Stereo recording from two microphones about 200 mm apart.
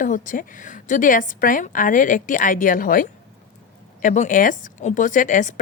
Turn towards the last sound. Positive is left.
turn(degrees=40)  # may be behind; listen again after turning